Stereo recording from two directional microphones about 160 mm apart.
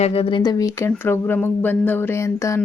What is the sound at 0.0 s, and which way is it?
Speech, 40° left (ahead or behind).